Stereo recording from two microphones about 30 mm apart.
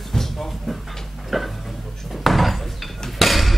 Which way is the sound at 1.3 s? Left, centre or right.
Centre.